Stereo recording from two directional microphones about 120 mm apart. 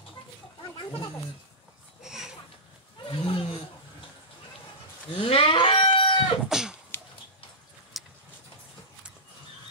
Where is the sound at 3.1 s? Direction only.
45° left (ahead or behind).